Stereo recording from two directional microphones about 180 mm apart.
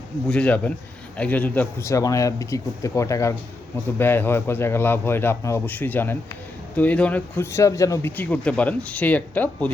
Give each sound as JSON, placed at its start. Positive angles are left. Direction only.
{"t": 0.3, "sound": "speech", "side_deg": 5}